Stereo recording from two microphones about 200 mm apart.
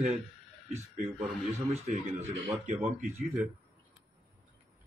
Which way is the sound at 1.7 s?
35° right (ahead or behind).